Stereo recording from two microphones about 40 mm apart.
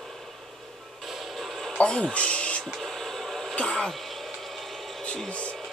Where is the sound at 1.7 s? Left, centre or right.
Centre.